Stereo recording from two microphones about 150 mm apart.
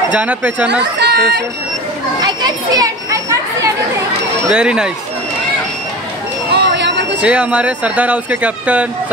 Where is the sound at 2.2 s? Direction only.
25° right (ahead or behind).